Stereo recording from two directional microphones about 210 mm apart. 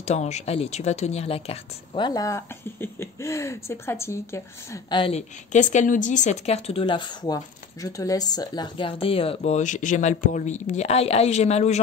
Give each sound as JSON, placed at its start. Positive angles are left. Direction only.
{"t": 0.0, "sound": "a woman's voice", "side_deg": 30}
{"t": 4.8, "sound": "a woman's voice", "side_deg": 25}